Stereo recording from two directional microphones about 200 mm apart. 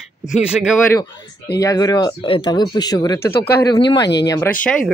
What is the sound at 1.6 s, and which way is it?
Speech, 20° left (ahead or behind).